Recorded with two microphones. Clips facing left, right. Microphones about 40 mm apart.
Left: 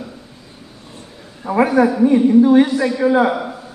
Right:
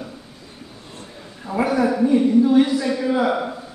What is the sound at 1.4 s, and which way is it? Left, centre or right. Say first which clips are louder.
A man's voice: left 6 dB; left.